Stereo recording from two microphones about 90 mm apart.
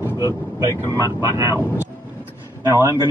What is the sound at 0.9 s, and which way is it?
Speech, 45° left (ahead or behind).